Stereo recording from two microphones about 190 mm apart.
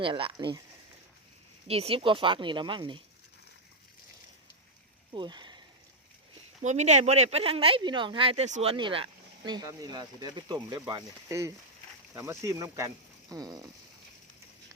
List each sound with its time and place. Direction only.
0.0 s speech: 25° right (ahead or behind)
1.6 s speech: 30° right (ahead or behind)
5.1 s speech: 25° right (ahead or behind)
6.6 s speech: 35° right (ahead or behind); by 13.7 s 20° right (ahead or behind)